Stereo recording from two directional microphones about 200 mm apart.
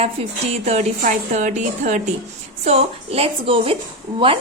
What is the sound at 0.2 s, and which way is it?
A woman's voice, 30° right (ahead or behind).